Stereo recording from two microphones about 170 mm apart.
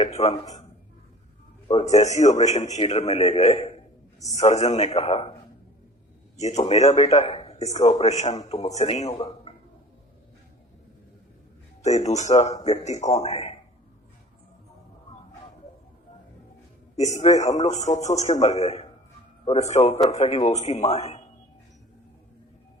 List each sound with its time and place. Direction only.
0.0 s a man's voice: 40° left (ahead or behind)
1.9 s a man's voice: 45° left (ahead or behind)
6.7 s a man's voice: 40° left (ahead or behind)
11.8 s a man's voice: 40° left (ahead or behind)
17.0 s a man's voice: 40° left (ahead or behind)